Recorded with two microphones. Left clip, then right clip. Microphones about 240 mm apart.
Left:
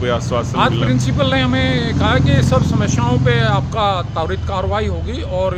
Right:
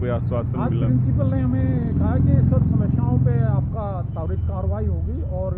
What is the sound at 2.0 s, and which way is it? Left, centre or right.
Speech, left.